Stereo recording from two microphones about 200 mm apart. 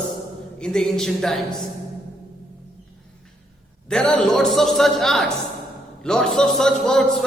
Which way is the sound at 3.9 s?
5° left (ahead or behind).